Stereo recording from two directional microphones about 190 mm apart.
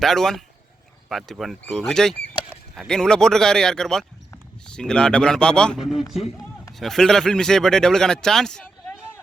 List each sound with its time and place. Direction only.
0.0 s speech: centre (ahead or behind)